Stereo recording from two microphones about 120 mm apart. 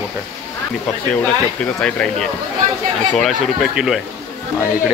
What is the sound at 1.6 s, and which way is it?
Speech, 10° left (ahead or behind).